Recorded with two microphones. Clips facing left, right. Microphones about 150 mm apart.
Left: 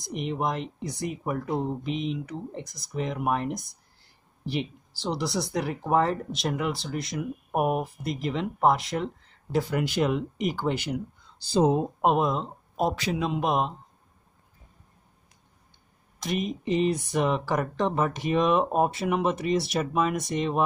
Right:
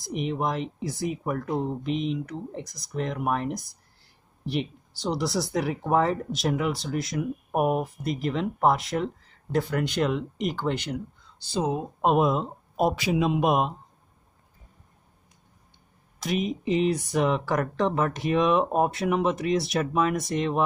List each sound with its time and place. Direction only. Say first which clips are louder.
0.1 s speech: right 1 dB; centre (ahead or behind)
11.4 s speech: left 5 dB; 35° left (ahead or behind)
12.0 s speech: right 6 dB; 5° right (ahead or behind)
16.2 s speech: right 2 dB; centre (ahead or behind)